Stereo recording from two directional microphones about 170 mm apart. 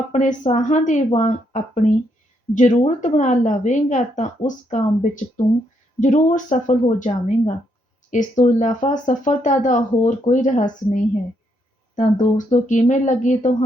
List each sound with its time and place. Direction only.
0.1 s speech: 45° left (ahead or behind)